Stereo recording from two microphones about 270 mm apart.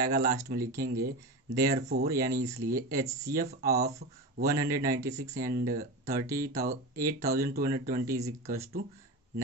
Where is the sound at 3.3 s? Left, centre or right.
Right.